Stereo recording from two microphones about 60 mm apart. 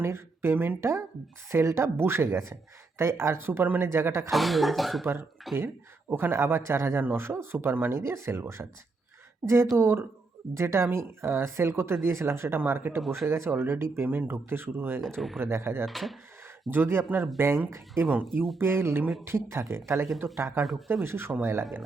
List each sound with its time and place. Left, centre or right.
0.0 s speech: right
4.3 s speech: centre
5.5 s speech: right
9.7 s speech: right
15.0 s speech: centre
15.4 s speech: right
15.9 s speech: centre
16.6 s speech: right
20.7 s speech: centre
20.9 s speech: right